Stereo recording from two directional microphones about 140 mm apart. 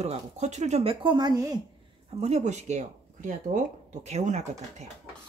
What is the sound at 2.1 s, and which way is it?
Speech, 50° right (ahead or behind).